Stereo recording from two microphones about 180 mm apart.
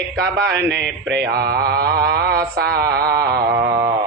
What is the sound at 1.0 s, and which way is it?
A man's voice, 65° right (ahead or behind).